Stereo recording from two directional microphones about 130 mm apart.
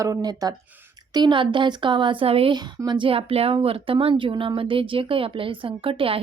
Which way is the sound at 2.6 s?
30° right (ahead or behind).